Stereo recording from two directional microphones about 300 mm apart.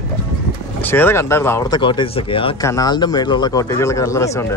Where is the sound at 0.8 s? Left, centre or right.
Centre.